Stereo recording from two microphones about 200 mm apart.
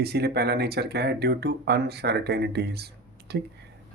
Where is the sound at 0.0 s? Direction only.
55° right (ahead or behind).